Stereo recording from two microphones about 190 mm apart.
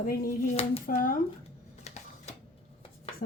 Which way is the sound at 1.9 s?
35° left (ahead or behind).